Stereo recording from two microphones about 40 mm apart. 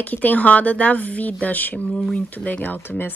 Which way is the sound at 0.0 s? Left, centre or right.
Left.